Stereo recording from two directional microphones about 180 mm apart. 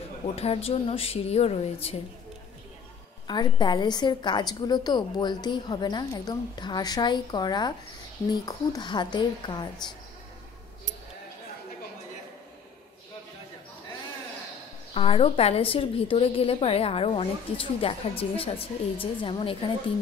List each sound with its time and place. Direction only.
0.4 s a woman's voice: 35° left (ahead or behind)
3.3 s a woman's voice: 25° left (ahead or behind)
15.0 s a woman's voice: 30° left (ahead or behind)